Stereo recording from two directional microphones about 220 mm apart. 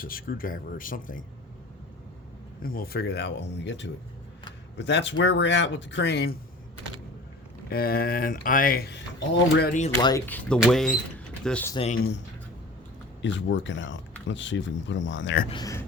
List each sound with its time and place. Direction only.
0.0 s speech: 40° left (ahead or behind)
2.6 s speech: 40° left (ahead or behind)
7.7 s speech: 45° left (ahead or behind)
10.0 s speech: 15° left (ahead or behind)
11.7 s speech: 25° left (ahead or behind)
13.2 s speech: 55° left (ahead or behind)
15.4 s speech: 20° left (ahead or behind)